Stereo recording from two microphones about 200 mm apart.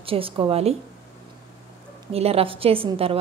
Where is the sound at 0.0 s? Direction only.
25° right (ahead or behind).